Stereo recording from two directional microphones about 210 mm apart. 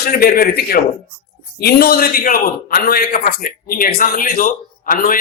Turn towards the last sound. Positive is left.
turn(degrees=40)  # may be behind; listen again after turning